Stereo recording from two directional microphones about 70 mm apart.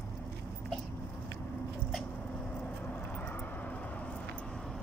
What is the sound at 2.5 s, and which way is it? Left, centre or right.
Vehicle, centre.